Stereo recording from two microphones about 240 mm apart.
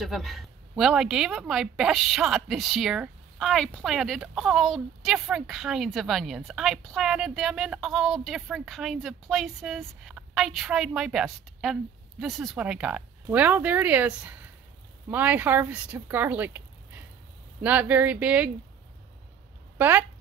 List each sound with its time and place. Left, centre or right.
0.0 s a woman's voice: centre
19.8 s speech: centre